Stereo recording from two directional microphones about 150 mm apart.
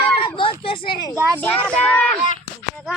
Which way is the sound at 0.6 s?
35° left (ahead or behind).